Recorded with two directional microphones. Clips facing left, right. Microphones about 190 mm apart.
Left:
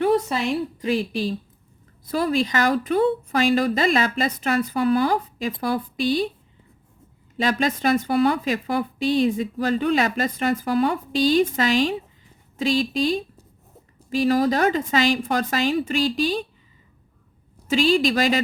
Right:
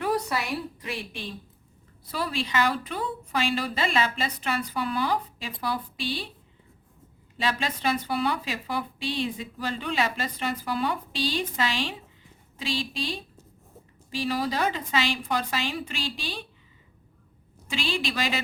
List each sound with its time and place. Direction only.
0.0 s a woman's voice: 25° left (ahead or behind); by 6.2 s 45° left (ahead or behind)
7.3 s speech: 45° left (ahead or behind)
17.7 s speech: 40° left (ahead or behind)